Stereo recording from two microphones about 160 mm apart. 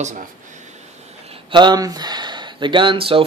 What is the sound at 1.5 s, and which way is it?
Speech, 25° right (ahead or behind).